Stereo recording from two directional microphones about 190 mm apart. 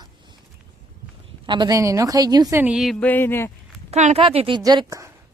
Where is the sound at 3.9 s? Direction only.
35° right (ahead or behind); by 5.1 s 20° right (ahead or behind).